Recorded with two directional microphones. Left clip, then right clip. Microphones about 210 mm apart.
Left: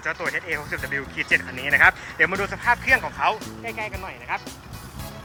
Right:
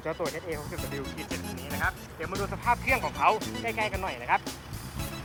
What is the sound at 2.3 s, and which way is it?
Speech, centre (ahead or behind).